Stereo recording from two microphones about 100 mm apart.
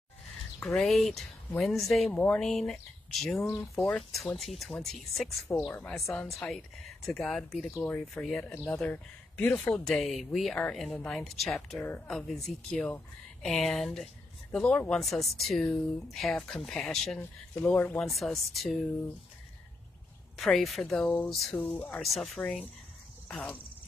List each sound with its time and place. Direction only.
0.7 s speech: 5° left (ahead or behind)
3.4 s speech: 20° left (ahead or behind)
3.8 s speech: 5° left (ahead or behind)
9.7 s speech: 5° left (ahead or behind)
18.0 s speech: centre (ahead or behind)
20.3 s speech: centre (ahead or behind)